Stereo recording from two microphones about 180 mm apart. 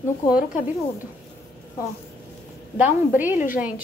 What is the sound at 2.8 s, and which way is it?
A woman's voice, 10° right (ahead or behind).